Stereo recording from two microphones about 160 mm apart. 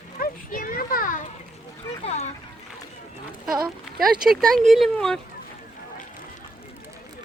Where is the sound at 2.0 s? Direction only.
40° left (ahead or behind).